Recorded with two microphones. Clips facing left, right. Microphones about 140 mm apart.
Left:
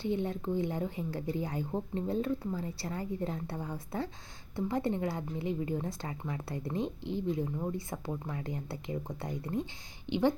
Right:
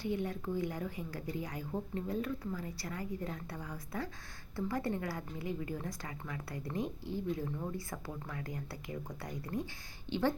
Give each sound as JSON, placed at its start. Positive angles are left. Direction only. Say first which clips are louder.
{"t": 0.0, "sound": "a woman's voice", "louder": "left 3 dB", "side_deg": 25}